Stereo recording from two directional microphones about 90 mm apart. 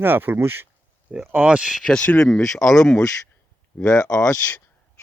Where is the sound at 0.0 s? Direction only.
25° right (ahead or behind).